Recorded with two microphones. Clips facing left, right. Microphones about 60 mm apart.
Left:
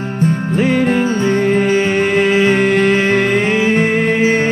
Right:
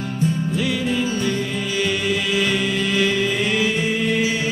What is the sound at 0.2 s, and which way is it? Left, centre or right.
Music, left.